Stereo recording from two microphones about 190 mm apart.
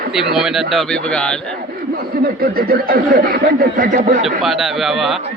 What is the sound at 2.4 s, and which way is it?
Speech, 50° right (ahead or behind).